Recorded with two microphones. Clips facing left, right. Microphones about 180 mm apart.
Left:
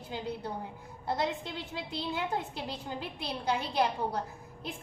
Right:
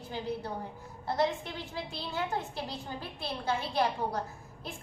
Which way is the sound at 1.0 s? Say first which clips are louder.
Right 2 dB; 15° left (ahead or behind).